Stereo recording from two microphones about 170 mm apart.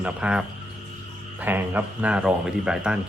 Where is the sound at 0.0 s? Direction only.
5° right (ahead or behind).